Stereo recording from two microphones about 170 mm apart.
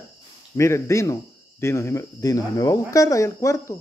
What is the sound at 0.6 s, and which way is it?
Speech, 15° left (ahead or behind).